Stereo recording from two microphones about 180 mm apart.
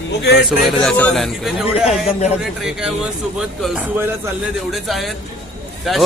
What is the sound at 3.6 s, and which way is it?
A man's voice, 5° right (ahead or behind).